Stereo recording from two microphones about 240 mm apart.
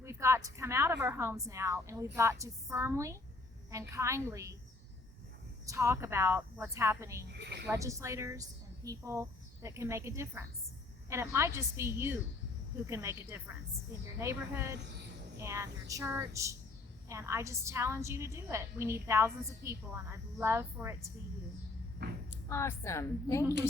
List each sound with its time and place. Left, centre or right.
0.0 s a woman's voice: centre
5.6 s a woman's voice: centre
7.3 s speech: right
7.7 s a woman's voice: centre
22.0 s speech: right
22.4 s a woman's voice: centre